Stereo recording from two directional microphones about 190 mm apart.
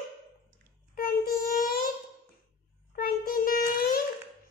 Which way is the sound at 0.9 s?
50° left (ahead or behind).